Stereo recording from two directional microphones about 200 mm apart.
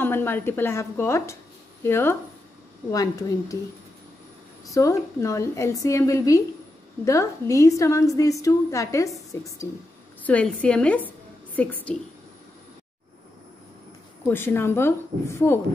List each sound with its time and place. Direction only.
0.0 s a woman's voice: 10° left (ahead or behind)
4.6 s a woman's voice: 15° left (ahead or behind)
14.2 s a woman's voice: 10° left (ahead or behind)